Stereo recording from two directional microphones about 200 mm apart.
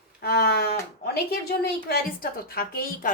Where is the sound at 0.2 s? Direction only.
50° left (ahead or behind).